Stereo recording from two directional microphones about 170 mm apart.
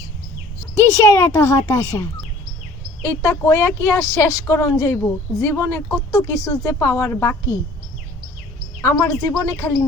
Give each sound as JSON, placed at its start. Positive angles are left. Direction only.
{"t": 0.8, "sound": "a child's voice", "side_deg": 20}
{"t": 8.8, "sound": "a woman's voice", "side_deg": 15}